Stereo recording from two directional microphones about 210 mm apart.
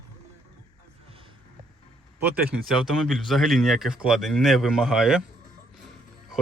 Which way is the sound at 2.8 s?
Centre (ahead or behind).